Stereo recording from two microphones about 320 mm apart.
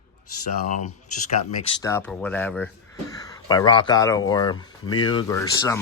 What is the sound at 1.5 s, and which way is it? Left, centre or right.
Speech, centre.